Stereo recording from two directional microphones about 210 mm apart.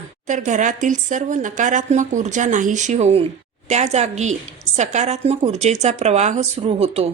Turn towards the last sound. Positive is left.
turn(degrees=-30)  # may be behind; listen again after turning